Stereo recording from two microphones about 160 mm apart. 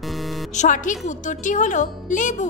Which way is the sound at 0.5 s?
50° left (ahead or behind).